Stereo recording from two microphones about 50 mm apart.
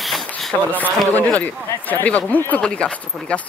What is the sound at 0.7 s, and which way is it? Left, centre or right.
Speech, left.